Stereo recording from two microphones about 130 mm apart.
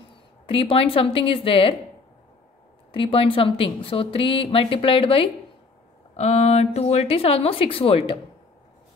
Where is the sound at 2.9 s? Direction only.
45° left (ahead or behind).